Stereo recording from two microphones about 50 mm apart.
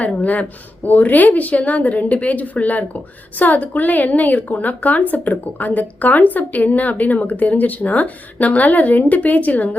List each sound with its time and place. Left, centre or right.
0.0 s a woman's voice: left